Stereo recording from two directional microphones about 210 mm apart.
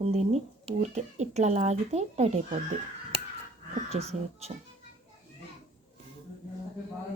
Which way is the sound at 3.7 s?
30° right (ahead or behind).